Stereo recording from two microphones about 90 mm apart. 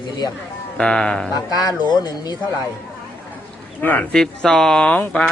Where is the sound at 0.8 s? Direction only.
10° left (ahead or behind).